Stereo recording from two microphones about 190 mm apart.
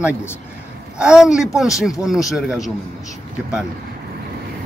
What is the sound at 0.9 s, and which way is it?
Speech, 5° right (ahead or behind).